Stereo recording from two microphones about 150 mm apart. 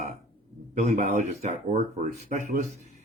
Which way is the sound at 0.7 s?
50° right (ahead or behind).